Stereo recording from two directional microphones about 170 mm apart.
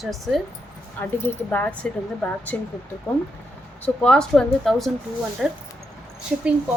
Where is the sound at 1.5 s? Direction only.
10° left (ahead or behind).